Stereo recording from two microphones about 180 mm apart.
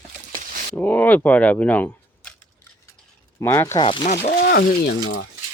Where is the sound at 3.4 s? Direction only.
15° left (ahead or behind).